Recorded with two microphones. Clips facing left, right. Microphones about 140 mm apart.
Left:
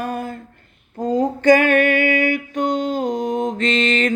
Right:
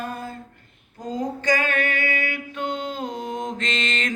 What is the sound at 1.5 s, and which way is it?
Music, 60° left (ahead or behind).